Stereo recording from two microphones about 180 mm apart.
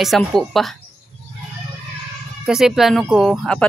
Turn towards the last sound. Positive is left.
turn(degrees=0)  # may be behind; listen again after turning